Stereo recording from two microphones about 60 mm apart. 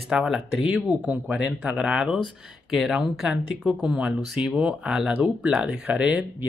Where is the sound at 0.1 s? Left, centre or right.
Centre.